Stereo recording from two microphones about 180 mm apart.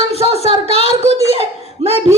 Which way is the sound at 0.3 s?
35° left (ahead or behind).